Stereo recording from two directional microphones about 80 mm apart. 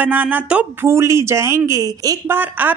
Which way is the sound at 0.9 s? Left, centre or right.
Right.